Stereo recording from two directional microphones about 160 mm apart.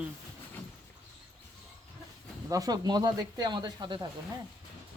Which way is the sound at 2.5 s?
25° right (ahead or behind).